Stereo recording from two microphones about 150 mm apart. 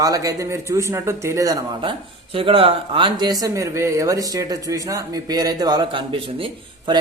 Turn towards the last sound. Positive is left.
turn(degrees=-35)  # may be behind; listen again after turning